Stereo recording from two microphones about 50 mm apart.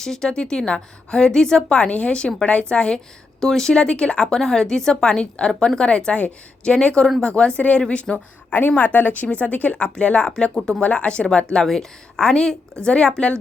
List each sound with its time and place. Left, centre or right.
0.0 s a woman's voice: centre
6.1 s speech: left
6.7 s a woman's voice: centre
9.7 s a woman's voice: left
11.6 s a woman's voice: centre